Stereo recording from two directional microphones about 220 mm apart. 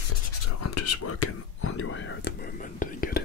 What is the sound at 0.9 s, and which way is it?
Whispering, 90° left.